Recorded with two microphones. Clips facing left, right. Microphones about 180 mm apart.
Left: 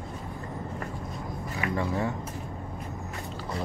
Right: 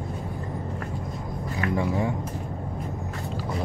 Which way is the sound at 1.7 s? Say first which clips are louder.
Right 3 dB; 15° right (ahead or behind).